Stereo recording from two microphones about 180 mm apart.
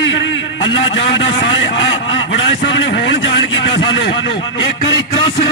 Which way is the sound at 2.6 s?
65° left (ahead or behind).